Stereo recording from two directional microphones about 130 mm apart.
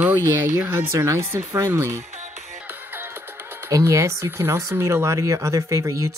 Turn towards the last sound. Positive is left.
turn(degrees=-25)  # may be behind; listen again after turning